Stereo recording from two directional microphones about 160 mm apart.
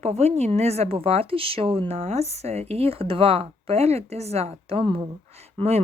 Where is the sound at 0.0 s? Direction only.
40° right (ahead or behind).